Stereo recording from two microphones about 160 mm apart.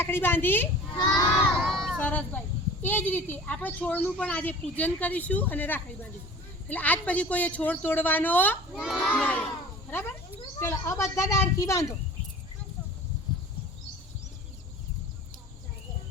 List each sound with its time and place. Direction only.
0.0 s a woman's voice: 15° left (ahead or behind)
0.9 s speech: 25° left (ahead or behind)
1.6 s a sound: centre (ahead or behind)
2.8 s a woman's voice: 10° left (ahead or behind)
8.7 s a child's voice: centre (ahead or behind)
9.0 s a woman's voice: 10° left (ahead or behind)
10.6 s speech: 15° left (ahead or behind)